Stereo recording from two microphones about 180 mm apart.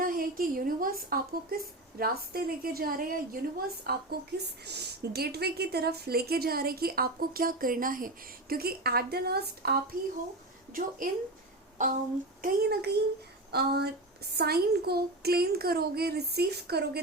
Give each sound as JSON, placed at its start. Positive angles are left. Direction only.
{"t": 0.0, "sound": "a woman's voice", "side_deg": -50}
{"t": 3.8, "sound": "a woman's voice", "side_deg": -65}
{"t": 10.7, "sound": "a woman's voice", "side_deg": -50}
{"t": 12.4, "sound": "a woman's voice", "side_deg": -65}